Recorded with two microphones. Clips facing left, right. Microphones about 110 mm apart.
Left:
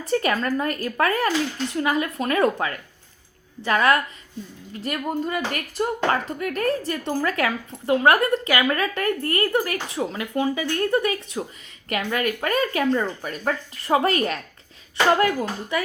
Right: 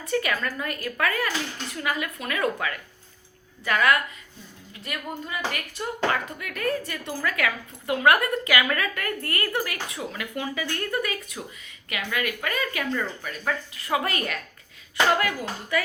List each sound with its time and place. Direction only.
0.1 s speech: 35° left (ahead or behind)
11.9 s speech: 40° left (ahead or behind)